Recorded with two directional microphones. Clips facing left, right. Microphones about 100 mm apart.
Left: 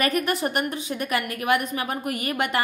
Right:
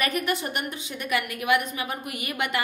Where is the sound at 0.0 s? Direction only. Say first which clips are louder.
Left 3 dB; 40° left (ahead or behind).